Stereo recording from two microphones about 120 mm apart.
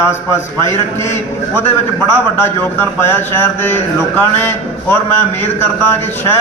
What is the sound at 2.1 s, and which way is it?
A man's voice, 15° left (ahead or behind).